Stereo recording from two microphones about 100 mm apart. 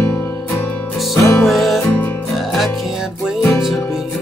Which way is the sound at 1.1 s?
30° left (ahead or behind).